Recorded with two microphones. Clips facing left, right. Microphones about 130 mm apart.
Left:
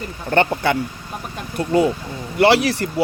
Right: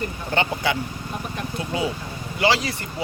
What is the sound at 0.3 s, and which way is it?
Speech, 55° left (ahead or behind).